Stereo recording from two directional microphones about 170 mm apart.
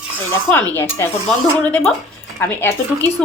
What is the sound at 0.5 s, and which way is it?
Speech, 15° left (ahead or behind).